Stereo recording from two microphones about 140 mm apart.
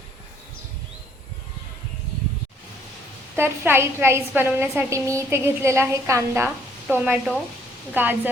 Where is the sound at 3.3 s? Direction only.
15° right (ahead or behind).